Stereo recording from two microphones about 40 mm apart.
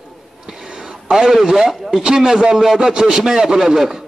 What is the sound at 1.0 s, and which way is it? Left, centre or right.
A man's voice, centre.